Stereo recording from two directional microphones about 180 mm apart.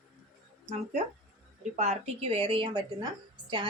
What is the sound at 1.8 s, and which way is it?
Speech, 35° right (ahead or behind).